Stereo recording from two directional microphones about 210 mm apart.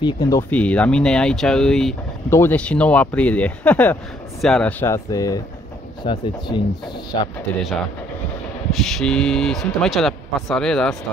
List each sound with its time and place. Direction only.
0.0 s speech: 15° left (ahead or behind)
8.7 s speech: centre (ahead or behind)